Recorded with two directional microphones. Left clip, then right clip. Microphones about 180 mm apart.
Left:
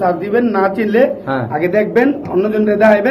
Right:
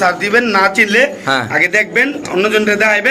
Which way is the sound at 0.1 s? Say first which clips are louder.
Right 3 dB; 10° left (ahead or behind).